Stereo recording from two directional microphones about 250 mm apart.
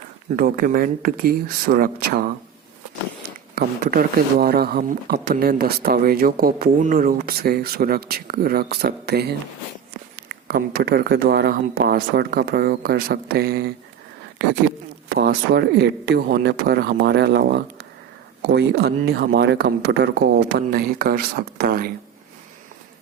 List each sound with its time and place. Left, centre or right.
0.3 s speech: right
3.2 s speech: right
15.1 s speech: right